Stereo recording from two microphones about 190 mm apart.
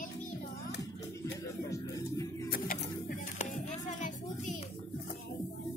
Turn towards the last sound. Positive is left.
turn(degrees=40)  # may be behind; listen again after turning